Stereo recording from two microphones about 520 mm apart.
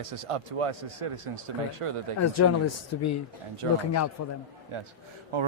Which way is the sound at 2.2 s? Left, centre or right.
Left.